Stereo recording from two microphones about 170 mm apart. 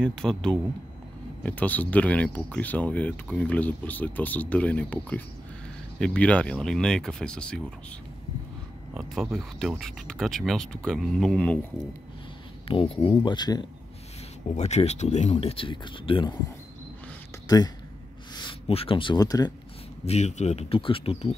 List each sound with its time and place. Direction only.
0.0 s speech: 5° left (ahead or behind)
8.9 s speech: centre (ahead or behind)
12.6 s speech: 35° left (ahead or behind)
14.5 s speech: 40° left (ahead or behind)
18.3 s speech: 30° left (ahead or behind)
20.1 s speech: 40° left (ahead or behind)